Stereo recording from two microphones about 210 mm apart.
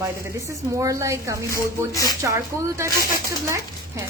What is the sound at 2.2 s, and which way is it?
Speech, 15° right (ahead or behind).